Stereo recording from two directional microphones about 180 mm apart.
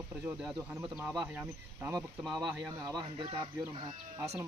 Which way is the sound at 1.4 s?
10° right (ahead or behind).